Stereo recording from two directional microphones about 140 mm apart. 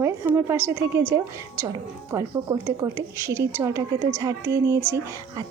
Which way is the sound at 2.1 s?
25° right (ahead or behind).